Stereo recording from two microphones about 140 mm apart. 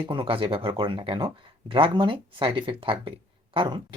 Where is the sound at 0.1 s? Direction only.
40° right (ahead or behind).